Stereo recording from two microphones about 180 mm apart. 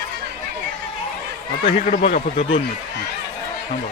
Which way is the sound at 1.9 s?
35° left (ahead or behind).